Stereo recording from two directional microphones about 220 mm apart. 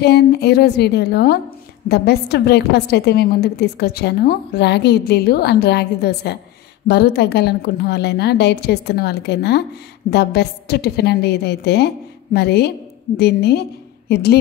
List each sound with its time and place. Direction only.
0.0 s a woman's voice: 50° left (ahead or behind)